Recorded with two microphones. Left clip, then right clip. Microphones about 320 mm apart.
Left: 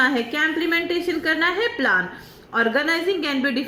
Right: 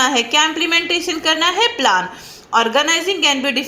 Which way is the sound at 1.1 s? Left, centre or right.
Centre.